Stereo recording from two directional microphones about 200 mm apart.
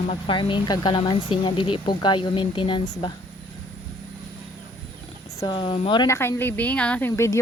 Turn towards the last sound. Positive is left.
turn(degrees=15)  # may be behind; listen again after turning